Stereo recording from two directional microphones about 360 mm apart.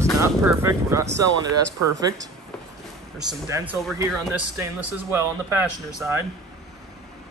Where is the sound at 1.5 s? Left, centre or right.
Right.